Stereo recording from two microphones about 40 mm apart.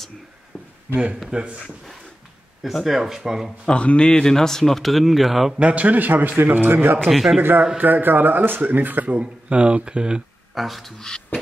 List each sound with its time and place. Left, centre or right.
1.3 s speech: right
2.8 s speech: centre
3.6 s a man's voice: left
4.2 s speech: centre
5.6 s speech: right
7.1 s speech: centre
7.7 s speech: right
9.2 s speech: right
10.5 s speech: centre
11.0 s speech: centre